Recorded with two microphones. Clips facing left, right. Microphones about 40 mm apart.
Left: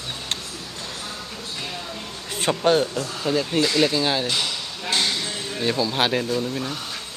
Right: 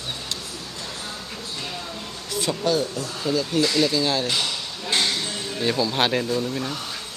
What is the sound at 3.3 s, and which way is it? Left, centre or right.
Speech, left.